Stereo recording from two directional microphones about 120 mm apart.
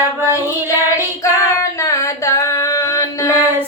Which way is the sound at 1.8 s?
25° left (ahead or behind).